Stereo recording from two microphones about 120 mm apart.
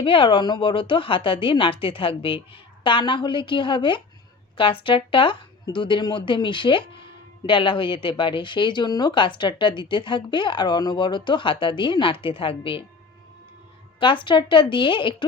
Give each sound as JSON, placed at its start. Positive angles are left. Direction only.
{"t": 0.0, "sound": "speech", "side_deg": 45}
{"t": 14.0, "sound": "speech", "side_deg": 45}